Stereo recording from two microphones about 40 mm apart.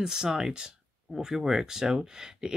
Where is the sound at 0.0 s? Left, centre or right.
Centre.